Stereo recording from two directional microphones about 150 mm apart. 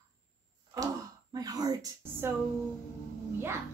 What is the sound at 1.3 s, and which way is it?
A woman's voice, 25° right (ahead or behind).